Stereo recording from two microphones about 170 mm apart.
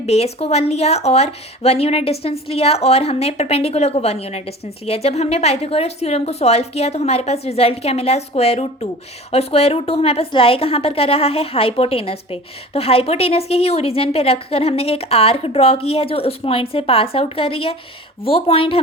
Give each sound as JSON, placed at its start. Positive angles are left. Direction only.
{"t": 0.0, "sound": "a woman's voice", "side_deg": 35}